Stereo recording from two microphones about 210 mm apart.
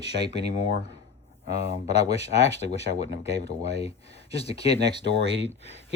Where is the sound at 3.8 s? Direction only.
30° left (ahead or behind).